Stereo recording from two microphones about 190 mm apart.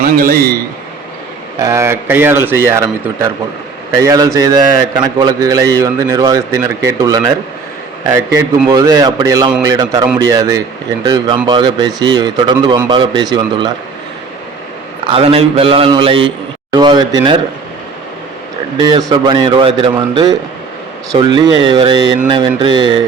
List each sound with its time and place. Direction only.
1.5 s a man's voice: 15° right (ahead or behind)
15.0 s a man's voice: 30° right (ahead or behind)
18.8 s a man's voice: 20° right (ahead or behind)